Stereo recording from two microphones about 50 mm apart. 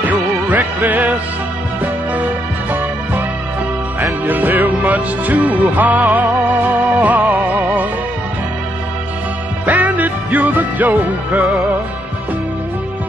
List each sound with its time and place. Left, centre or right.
0.0 s music: right
4.3 s music: right
9.7 s music: right